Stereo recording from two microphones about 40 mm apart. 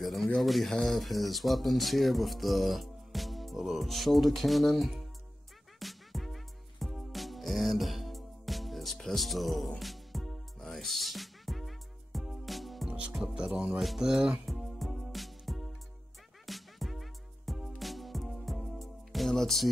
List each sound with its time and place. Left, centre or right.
0.0 s a sound: centre
0.4 s speech: centre
5.8 s music: centre
13.2 s speech: centre
13.7 s speech: centre
14.0 s speech: centre
14.4 s music: centre